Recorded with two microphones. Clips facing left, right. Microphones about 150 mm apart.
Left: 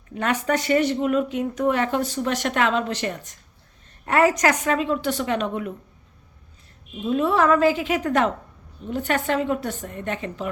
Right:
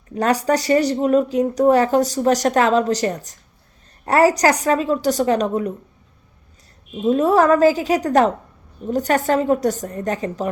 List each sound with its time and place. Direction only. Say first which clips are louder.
0.1 s speech: right 5 dB; 35° right (ahead or behind)
7.0 s speech: right 5 dB; 40° right (ahead or behind)